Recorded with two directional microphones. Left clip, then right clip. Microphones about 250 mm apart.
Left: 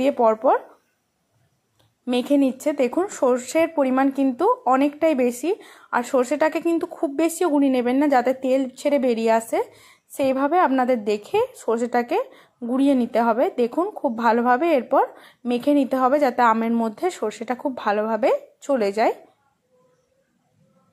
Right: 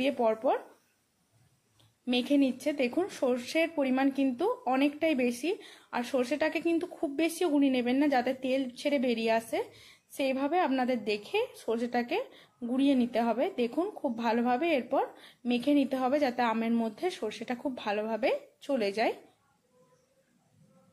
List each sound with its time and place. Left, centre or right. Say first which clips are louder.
0.0 s speech: left 10 dB; centre
2.0 s speech: left 8 dB; left